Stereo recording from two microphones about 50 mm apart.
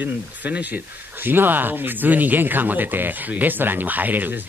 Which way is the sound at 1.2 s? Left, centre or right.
Right.